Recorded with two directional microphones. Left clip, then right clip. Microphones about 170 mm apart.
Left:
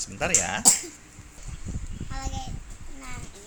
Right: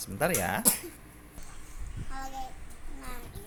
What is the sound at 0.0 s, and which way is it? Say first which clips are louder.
Speech: left 3 dB; 10° right (ahead or behind).